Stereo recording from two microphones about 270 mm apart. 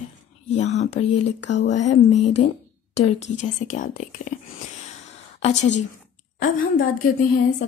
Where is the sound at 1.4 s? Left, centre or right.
Left.